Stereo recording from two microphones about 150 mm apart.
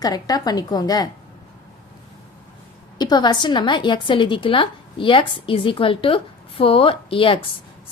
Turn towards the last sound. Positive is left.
turn(degrees=35)  # may be behind; listen again after turning